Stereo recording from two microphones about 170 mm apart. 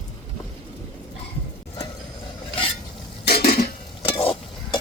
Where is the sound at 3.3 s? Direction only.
65° left (ahead or behind).